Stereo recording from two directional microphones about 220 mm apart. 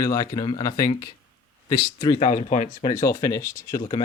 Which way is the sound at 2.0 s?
25° left (ahead or behind).